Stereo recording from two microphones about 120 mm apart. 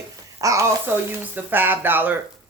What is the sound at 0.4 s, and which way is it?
Speech, 30° right (ahead or behind).